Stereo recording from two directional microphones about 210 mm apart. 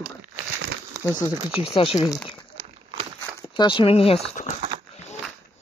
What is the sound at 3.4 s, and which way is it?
Speech, 20° left (ahead or behind).